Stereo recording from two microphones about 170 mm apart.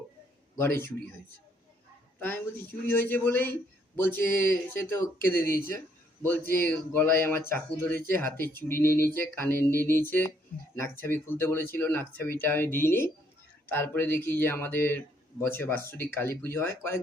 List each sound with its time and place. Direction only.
0.6 s speech: 15° left (ahead or behind)
2.1 s speech: 10° left (ahead or behind)
6.7 s speech: 10° left (ahead or behind)